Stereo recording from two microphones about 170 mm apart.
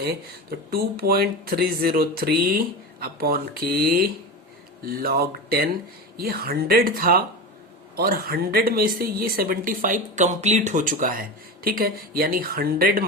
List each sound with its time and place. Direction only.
0.0 s a woman's voice: 70° right (ahead or behind)